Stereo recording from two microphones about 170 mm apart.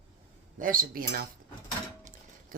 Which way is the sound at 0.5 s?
55° right (ahead or behind).